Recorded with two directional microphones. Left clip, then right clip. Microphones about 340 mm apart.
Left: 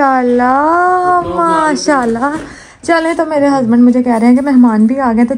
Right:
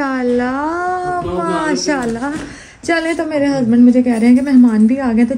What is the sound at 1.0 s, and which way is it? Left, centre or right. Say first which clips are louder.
Child singing: left 8 dB; left.